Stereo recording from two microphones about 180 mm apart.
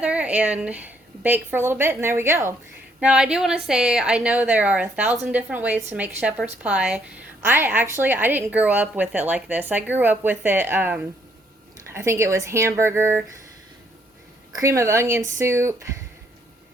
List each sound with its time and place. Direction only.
0.0 s a woman's voice: 5° right (ahead or behind)
14.5 s a woman's voice: 15° right (ahead or behind)